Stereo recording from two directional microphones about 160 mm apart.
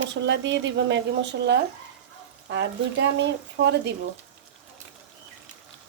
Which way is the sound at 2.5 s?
90° right.